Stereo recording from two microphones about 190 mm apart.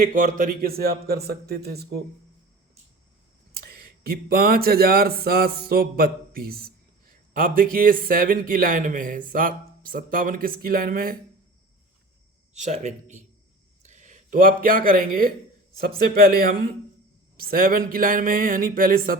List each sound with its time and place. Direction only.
0.0 s speech: 45° right (ahead or behind)
3.5 s speech: 55° right (ahead or behind)
12.5 s speech: 40° right (ahead or behind)